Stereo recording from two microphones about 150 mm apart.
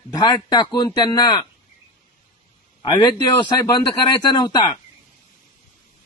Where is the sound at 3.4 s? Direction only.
30° left (ahead or behind).